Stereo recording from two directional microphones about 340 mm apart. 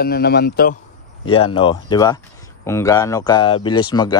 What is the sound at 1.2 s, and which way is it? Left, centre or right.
Speech, centre.